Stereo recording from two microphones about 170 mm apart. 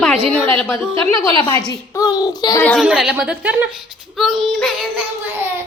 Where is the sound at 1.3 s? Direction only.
25° left (ahead or behind).